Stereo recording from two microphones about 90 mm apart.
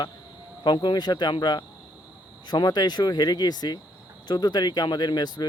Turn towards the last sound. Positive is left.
turn(degrees=50)  # may be behind; listen again after turning